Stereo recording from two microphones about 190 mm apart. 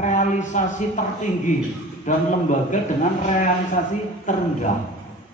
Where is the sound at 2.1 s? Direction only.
40° left (ahead or behind).